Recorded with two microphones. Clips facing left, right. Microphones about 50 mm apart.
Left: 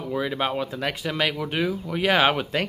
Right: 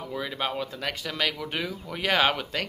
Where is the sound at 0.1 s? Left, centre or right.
Centre.